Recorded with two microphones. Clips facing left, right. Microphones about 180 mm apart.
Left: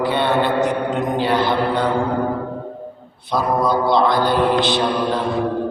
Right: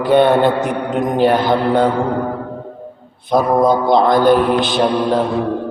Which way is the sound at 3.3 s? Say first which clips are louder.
Right 5 dB; 50° right (ahead or behind).